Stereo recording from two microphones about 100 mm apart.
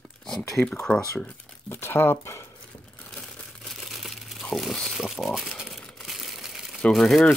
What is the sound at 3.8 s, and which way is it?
Crumpling, centre (ahead or behind).